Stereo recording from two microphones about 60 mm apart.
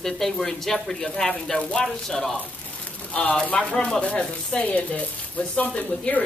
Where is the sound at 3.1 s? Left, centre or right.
Left.